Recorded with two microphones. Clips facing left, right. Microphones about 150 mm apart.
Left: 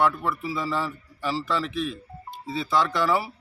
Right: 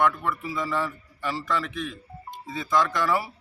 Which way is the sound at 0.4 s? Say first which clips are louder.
Even; 30° left (ahead or behind).